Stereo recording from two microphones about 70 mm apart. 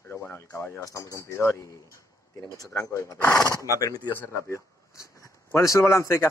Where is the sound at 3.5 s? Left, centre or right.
Left.